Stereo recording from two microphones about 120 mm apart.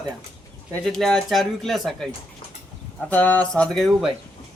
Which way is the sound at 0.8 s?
5° left (ahead or behind).